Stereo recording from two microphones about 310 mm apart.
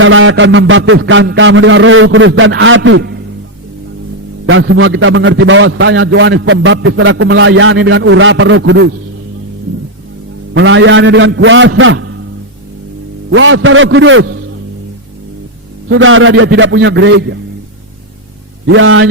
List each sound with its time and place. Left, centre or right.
0.0 s a man's voice: right
4.4 s a man's voice: right
10.5 s a man's voice: right
13.3 s a man's voice: right
15.9 s a man's voice: right
18.7 s a man's voice: right